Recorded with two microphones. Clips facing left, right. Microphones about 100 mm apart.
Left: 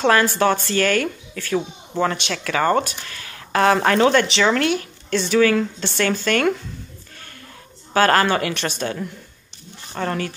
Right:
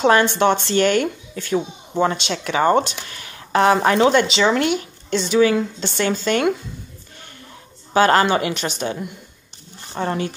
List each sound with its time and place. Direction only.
0.0 s speech: 25° right (ahead or behind)
7.9 s speech: 20° right (ahead or behind)